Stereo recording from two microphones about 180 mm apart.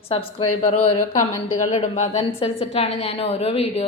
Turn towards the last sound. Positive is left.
turn(degrees=30)  # may be behind; listen again after turning